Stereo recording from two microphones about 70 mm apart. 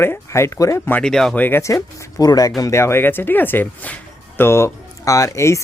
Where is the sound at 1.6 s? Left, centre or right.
Left.